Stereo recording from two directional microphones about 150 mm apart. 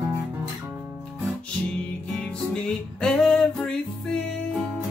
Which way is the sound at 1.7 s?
5° left (ahead or behind).